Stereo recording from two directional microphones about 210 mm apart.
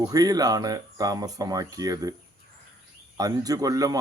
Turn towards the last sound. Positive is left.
turn(degrees=-15)  # may be behind; listen again after turning